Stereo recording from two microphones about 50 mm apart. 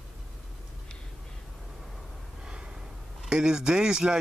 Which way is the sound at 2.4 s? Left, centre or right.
Centre.